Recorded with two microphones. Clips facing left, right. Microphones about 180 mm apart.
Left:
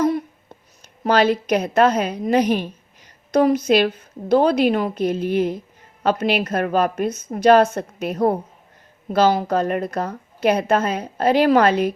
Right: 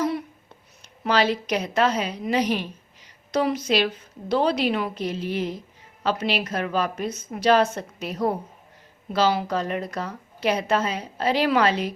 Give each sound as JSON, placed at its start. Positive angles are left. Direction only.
{"t": 1.0, "sound": "a woman's voice", "side_deg": 50}